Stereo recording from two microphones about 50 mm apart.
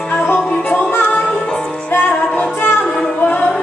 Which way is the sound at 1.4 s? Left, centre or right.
Centre.